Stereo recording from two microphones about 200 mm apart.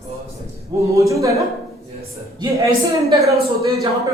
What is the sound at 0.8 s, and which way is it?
Speech, 15° right (ahead or behind).